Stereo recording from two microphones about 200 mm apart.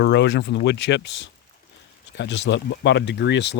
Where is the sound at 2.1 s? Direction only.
60° left (ahead or behind).